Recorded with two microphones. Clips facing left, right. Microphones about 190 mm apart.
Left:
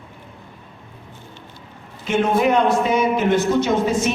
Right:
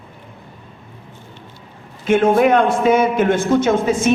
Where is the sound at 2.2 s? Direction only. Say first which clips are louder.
Right 3 dB; 55° right (ahead or behind).